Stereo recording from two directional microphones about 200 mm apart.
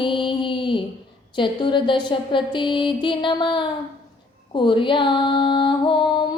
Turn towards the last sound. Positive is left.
turn(degrees=25)  # may be behind; listen again after turning